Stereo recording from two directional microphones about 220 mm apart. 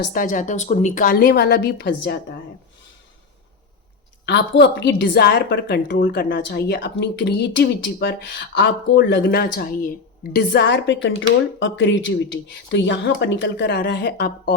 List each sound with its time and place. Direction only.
0.0 s a woman's voice: 40° left (ahead or behind)
4.3 s a woman's voice: 50° left (ahead or behind)